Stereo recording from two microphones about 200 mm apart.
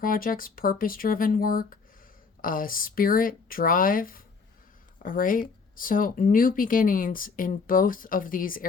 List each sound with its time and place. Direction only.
0.0 s speech: 45° left (ahead or behind)